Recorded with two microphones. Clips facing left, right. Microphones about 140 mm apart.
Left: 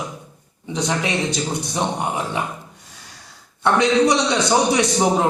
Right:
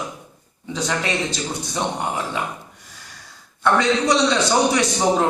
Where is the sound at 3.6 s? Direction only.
20° left (ahead or behind).